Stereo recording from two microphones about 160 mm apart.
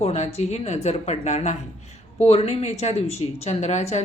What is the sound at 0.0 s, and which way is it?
A woman's voice, 40° left (ahead or behind).